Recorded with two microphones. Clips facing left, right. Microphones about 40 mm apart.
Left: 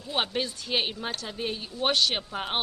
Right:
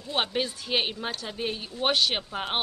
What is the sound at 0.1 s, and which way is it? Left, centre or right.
A woman's voice, centre.